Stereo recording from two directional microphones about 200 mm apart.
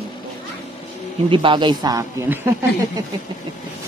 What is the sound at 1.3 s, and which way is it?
A man's voice, 25° right (ahead or behind).